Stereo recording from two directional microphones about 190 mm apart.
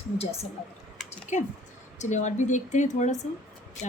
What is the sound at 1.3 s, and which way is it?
Speech, 40° left (ahead or behind).